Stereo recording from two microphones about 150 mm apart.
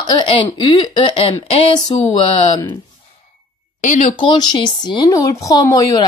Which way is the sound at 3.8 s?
55° left (ahead or behind).